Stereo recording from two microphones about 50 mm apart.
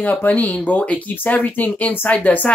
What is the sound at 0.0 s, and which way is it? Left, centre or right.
Speech, left.